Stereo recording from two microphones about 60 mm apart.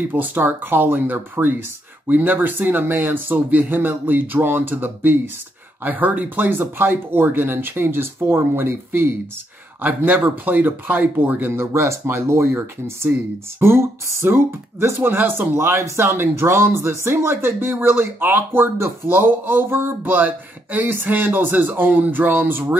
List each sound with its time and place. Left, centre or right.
0.1 s speech: right
11.5 s speech: right
15.5 s speech: right